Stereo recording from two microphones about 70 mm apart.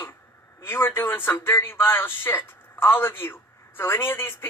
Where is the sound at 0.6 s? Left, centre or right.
Left.